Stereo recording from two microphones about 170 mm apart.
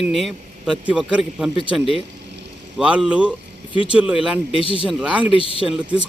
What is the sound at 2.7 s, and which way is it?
Speech, 5° right (ahead or behind).